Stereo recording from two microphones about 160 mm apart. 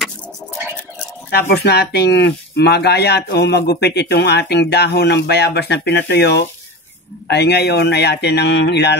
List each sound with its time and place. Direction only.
1.5 s speech: 85° left